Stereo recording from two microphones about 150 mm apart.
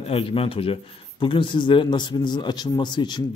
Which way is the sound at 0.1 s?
40° left (ahead or behind).